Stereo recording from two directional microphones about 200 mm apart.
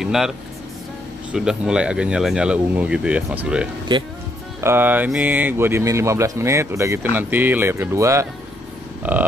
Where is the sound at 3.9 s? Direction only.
25° right (ahead or behind).